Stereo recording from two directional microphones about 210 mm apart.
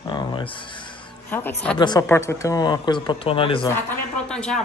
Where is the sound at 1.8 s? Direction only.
20° left (ahead or behind).